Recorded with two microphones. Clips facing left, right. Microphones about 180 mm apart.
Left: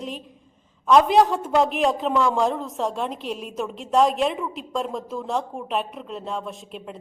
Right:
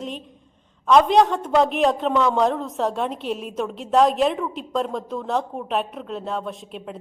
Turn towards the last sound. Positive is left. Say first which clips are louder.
# right 2 dB
turn(degrees=0)  # may be behind; listen again after turning